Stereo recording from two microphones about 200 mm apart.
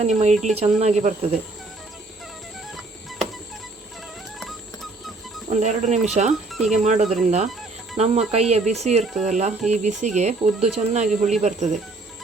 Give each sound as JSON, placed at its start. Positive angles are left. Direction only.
{"t": 0.0, "sound": "speech", "side_deg": -35}
{"t": 2.7, "sound": "a sound", "side_deg": 0}
{"t": 4.4, "sound": "a sound", "side_deg": 0}
{"t": 5.5, "sound": "speech", "side_deg": -35}
{"t": 6.5, "sound": "speech", "side_deg": 0}
{"t": 6.8, "sound": "speech", "side_deg": -35}